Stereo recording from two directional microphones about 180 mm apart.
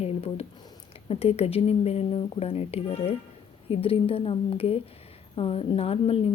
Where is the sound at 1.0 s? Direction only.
35° left (ahead or behind).